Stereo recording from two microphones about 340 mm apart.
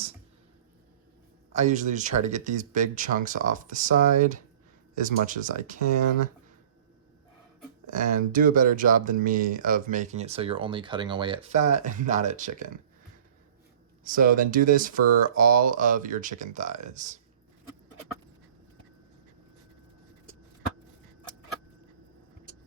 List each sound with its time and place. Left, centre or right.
1.5 s speech: right
7.9 s speech: right
14.0 s speech: right